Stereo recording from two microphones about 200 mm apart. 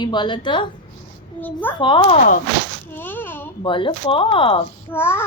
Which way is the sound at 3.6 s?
25° left (ahead or behind).